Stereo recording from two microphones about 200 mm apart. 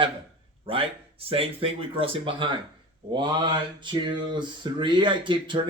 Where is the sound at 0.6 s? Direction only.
25° right (ahead or behind).